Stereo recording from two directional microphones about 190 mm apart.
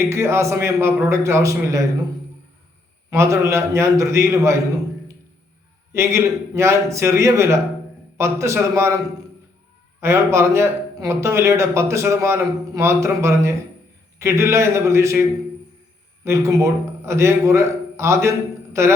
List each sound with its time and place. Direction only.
0.0 s a man's voice: 15° right (ahead or behind)
3.1 s a man's voice: 15° right (ahead or behind)
5.9 s a man's voice: 15° right (ahead or behind)
10.0 s a man's voice: 15° right (ahead or behind)
16.2 s a man's voice: 15° right (ahead or behind)